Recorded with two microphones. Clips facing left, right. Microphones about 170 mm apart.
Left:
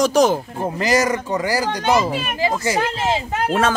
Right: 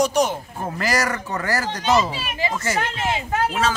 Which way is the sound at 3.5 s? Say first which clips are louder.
Left 4 dB; 55° left (ahead or behind).